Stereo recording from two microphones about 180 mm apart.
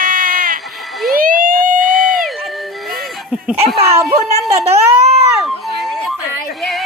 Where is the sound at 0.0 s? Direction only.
50° right (ahead or behind).